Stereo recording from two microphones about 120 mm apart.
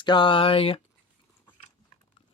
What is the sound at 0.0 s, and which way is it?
Speech, 40° left (ahead or behind).